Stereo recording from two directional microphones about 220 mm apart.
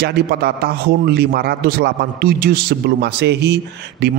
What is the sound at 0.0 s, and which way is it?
A man's voice, 45° right (ahead or behind).